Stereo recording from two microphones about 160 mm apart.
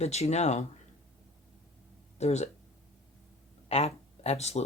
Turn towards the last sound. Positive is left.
turn(degrees=40)  # may be behind; listen again after turning